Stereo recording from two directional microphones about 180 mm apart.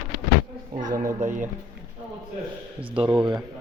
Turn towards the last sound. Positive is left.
turn(degrees=-10)  # may be behind; listen again after turning